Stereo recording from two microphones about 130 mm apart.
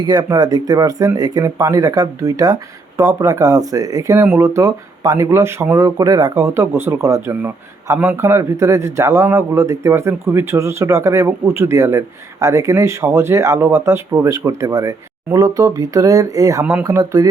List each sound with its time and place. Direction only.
0.0 s speech: 30° right (ahead or behind)